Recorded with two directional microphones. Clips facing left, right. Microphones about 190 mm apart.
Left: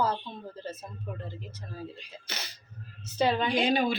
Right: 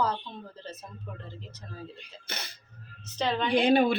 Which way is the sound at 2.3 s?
55° right (ahead or behind).